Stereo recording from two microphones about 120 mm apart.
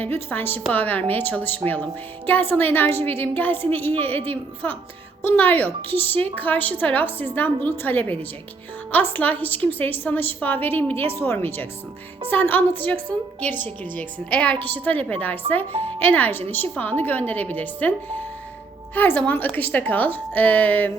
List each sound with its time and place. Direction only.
0.0 s a woman's voice: 15° left (ahead or behind)